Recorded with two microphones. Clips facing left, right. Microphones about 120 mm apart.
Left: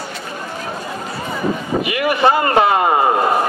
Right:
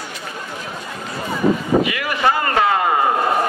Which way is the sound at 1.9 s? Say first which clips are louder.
Left 4 dB; 25° left (ahead or behind).